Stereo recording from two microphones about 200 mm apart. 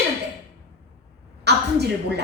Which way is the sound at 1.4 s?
55° right (ahead or behind).